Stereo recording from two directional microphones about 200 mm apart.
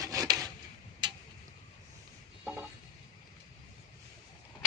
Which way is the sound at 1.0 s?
20° right (ahead or behind).